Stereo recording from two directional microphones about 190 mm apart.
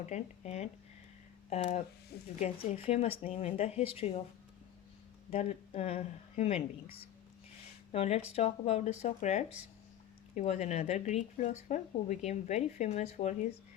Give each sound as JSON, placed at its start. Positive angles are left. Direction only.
{"t": 0.0, "sound": "speech", "side_deg": 35}
{"t": 2.1, "sound": "speech", "side_deg": 55}
{"t": 2.8, "sound": "speech", "side_deg": 35}
{"t": 5.3, "sound": "speech", "side_deg": 35}
{"t": 7.9, "sound": "speech", "side_deg": 35}